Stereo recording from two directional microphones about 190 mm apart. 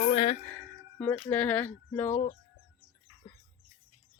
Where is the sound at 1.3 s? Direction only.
10° left (ahead or behind).